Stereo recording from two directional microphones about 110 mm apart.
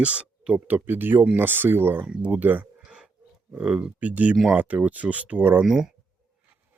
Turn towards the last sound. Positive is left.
turn(degrees=-15)  # may be behind; listen again after turning